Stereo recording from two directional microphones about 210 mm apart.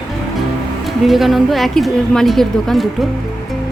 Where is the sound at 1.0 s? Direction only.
Centre (ahead or behind).